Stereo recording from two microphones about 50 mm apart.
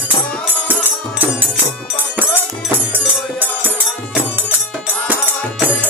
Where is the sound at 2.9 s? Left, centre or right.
Right.